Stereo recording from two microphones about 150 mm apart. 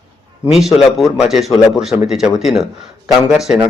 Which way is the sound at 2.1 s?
5° right (ahead or behind).